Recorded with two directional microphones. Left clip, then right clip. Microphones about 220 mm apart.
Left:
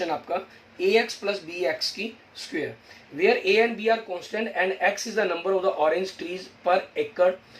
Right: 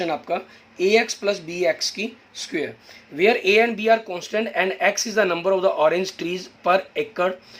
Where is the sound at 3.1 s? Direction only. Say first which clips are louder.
Right 4 dB; 45° right (ahead or behind).